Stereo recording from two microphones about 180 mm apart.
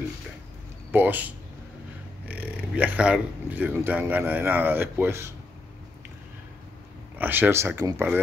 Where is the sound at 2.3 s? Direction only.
10° right (ahead or behind).